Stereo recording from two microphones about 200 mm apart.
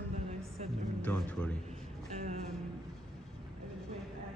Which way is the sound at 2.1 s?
35° right (ahead or behind).